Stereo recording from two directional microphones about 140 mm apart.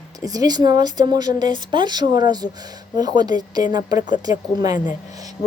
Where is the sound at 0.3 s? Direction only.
30° right (ahead or behind).